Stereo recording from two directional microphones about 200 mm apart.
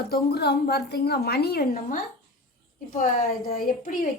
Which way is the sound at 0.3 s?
50° left (ahead or behind).